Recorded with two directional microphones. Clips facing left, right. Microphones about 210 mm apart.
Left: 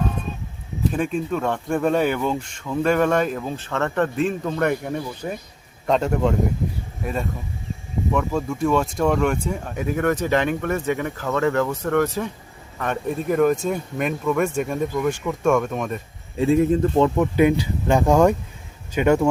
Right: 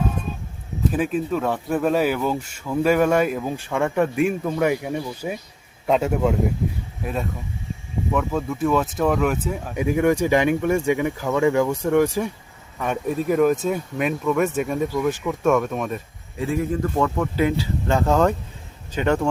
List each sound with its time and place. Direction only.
0.9 s speech: 5° right (ahead or behind)
16.4 s speech: 25° left (ahead or behind)